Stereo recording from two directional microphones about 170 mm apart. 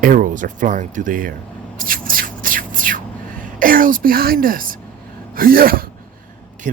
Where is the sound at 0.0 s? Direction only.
50° right (ahead or behind).